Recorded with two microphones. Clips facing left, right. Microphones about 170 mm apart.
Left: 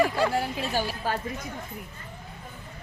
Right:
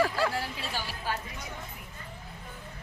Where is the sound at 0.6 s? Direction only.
45° left (ahead or behind).